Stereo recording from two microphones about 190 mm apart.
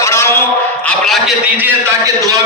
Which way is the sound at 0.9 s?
Centre (ahead or behind).